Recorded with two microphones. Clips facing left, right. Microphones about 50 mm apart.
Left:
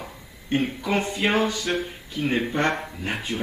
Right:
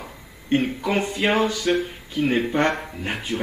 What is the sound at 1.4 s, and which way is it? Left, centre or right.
Speech, right.